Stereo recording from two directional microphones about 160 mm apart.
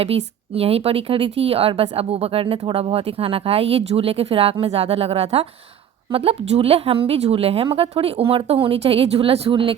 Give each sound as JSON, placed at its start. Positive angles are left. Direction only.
{"t": 0.0, "sound": "speech", "side_deg": -40}